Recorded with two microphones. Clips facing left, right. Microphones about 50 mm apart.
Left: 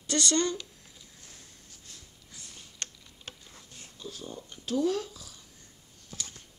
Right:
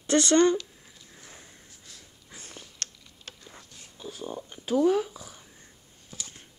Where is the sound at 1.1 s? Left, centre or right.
Right.